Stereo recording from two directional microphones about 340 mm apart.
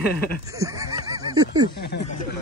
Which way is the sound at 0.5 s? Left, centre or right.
Centre.